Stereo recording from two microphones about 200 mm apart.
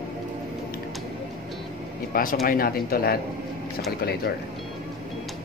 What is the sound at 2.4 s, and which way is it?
Speech, 45° left (ahead or behind).